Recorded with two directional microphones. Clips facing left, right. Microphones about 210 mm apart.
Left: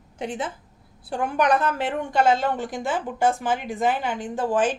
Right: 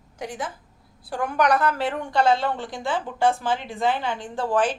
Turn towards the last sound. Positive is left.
turn(degrees=15)  # may be behind; listen again after turning